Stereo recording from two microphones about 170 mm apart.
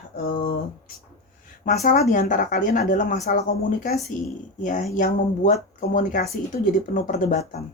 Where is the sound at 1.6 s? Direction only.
55° left (ahead or behind).